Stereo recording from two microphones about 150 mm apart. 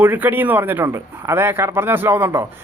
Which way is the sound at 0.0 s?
15° right (ahead or behind).